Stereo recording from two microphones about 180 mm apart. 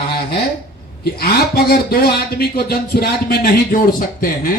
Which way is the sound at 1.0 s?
60° left (ahead or behind).